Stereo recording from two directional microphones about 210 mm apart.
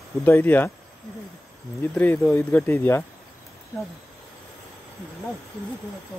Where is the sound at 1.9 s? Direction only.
10° left (ahead or behind).